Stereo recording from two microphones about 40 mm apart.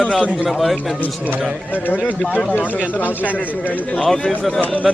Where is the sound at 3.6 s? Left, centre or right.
Left.